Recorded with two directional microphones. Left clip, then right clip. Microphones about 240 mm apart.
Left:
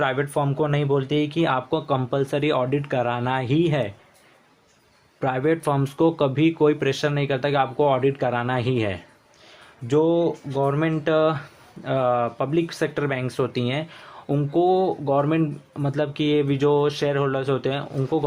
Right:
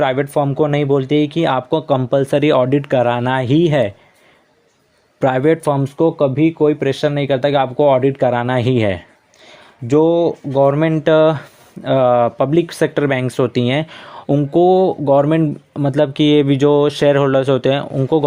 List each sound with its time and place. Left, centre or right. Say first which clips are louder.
0.0 s speech: right 7 dB; right
5.2 s speech: right 8 dB; right